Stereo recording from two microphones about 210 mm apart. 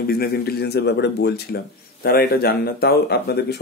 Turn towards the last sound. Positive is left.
turn(degrees=50)  # may be behind; listen again after turning